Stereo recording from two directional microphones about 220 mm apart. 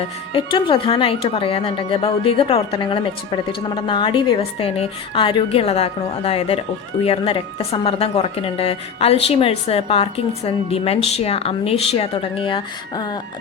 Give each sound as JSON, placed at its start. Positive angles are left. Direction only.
{"t": 0.3, "sound": "a woman's voice", "side_deg": 25}